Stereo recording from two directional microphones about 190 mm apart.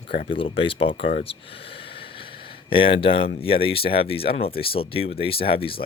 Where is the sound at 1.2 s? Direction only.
30° left (ahead or behind).